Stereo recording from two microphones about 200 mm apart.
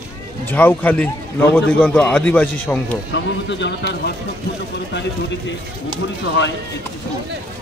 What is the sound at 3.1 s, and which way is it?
Speech, 60° left (ahead or behind).